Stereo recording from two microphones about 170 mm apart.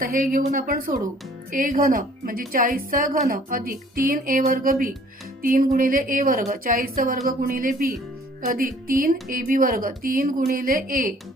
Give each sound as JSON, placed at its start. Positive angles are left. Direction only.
{"t": 0.0, "sound": "a woman's voice", "side_deg": -55}